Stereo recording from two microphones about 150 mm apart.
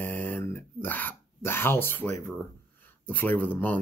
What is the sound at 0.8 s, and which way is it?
Speech, 15° left (ahead or behind).